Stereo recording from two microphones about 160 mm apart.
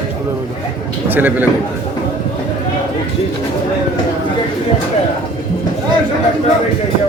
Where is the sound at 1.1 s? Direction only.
10° right (ahead or behind).